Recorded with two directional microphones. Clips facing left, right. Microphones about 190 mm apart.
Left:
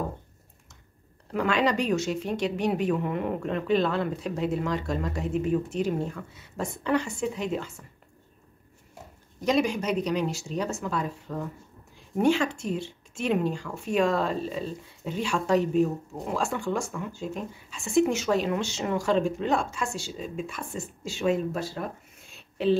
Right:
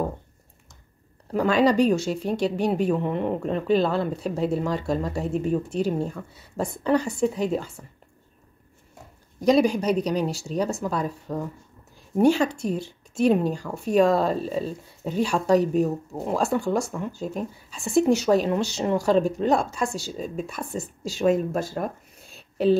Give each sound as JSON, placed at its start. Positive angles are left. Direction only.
{"t": 1.3, "sound": "speech", "side_deg": -35}
{"t": 9.4, "sound": "speech", "side_deg": -35}